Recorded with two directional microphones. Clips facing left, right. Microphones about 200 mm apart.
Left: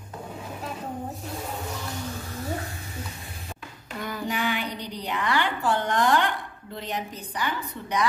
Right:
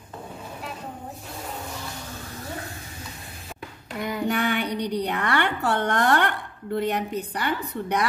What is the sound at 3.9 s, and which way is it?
Child singing, 20° right (ahead or behind).